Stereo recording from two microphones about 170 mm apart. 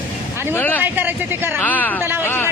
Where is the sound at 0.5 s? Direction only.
10° left (ahead or behind).